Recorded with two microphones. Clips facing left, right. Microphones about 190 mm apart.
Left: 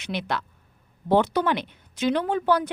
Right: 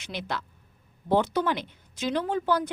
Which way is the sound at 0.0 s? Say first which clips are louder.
Left 5 dB; 65° left (ahead or behind).